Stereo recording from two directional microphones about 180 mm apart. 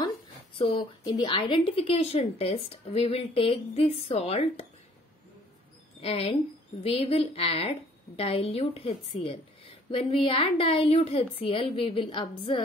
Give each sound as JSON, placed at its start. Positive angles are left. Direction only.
{"t": 0.6, "sound": "speech", "side_deg": 25}
{"t": 5.9, "sound": "speech", "side_deg": 35}